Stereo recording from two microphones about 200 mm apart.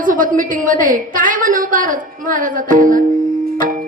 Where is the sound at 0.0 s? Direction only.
40° right (ahead or behind).